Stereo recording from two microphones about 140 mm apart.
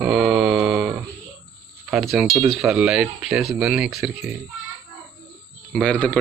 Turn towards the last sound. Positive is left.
turn(degrees=10)  # may be behind; listen again after turning